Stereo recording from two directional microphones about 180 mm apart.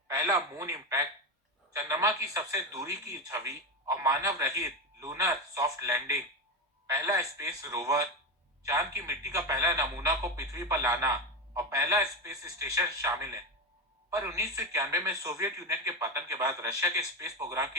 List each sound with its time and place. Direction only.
0.1 s speech: 20° right (ahead or behind)